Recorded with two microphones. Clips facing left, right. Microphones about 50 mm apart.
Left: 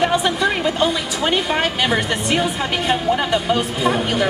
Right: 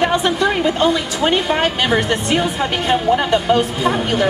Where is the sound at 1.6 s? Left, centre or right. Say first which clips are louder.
Right 2 dB; centre.